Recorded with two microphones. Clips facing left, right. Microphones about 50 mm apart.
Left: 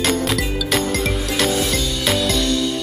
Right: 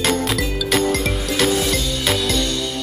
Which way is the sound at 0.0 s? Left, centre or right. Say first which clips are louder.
Even; centre.